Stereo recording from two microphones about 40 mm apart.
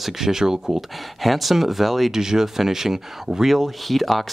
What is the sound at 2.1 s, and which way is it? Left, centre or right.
Speech, centre.